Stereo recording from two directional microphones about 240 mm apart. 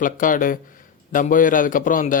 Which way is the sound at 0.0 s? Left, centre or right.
Left.